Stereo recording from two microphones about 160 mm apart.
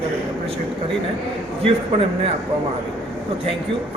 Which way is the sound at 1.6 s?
35° right (ahead or behind).